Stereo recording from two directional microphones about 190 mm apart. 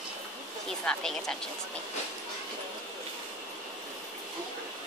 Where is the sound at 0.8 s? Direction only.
Centre (ahead or behind).